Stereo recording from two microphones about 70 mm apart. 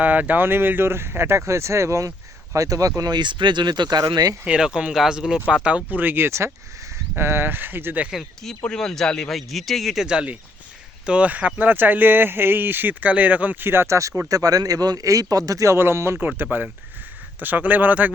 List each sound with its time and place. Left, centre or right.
0.0 s a man's voice: right
3.0 s speech: right
4.1 s speech: right
4.4 s speech: centre
5.6 s speech: right
8.6 s speech: centre; by 14.1 s right
14.3 s a man's voice: right
16.2 s speech: right